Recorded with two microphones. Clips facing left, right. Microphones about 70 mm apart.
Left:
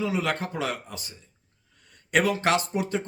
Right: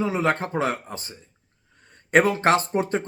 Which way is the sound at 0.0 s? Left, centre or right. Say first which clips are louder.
Right 4 dB; right.